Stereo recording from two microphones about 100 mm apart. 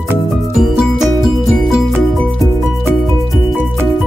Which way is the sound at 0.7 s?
Centre (ahead or behind).